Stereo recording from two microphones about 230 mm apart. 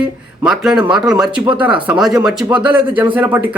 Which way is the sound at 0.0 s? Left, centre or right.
Centre.